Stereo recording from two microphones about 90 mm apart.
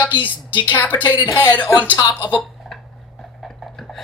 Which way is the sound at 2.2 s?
55° left (ahead or behind).